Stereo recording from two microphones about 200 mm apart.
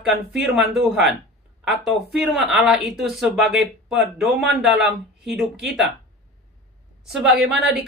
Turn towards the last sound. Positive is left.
turn(degrees=0)  # may be behind; listen again after turning